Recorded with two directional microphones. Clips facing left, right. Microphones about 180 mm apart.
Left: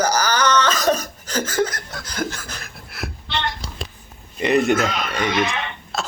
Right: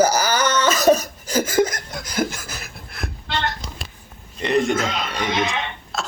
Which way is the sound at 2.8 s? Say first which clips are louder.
Left 1 dB; 5° left (ahead or behind).